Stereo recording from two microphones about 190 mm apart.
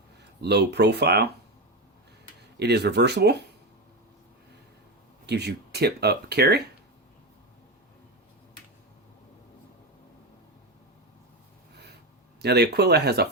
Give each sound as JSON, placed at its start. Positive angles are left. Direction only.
{"t": 0.4, "sound": "speech", "side_deg": -60}
{"t": 2.6, "sound": "speech", "side_deg": -60}
{"t": 5.2, "sound": "speech", "side_deg": -60}
{"t": 12.4, "sound": "speech", "side_deg": -60}